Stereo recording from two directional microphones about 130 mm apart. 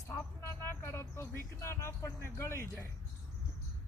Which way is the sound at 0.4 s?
20° left (ahead or behind).